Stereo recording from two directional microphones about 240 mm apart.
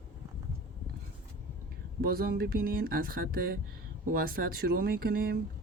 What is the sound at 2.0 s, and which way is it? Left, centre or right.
Speech, right.